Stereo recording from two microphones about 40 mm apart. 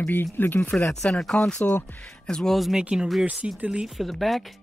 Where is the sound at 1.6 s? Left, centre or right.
Left.